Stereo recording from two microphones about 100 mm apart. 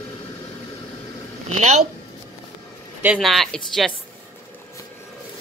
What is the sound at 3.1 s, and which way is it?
Speech, centre (ahead or behind).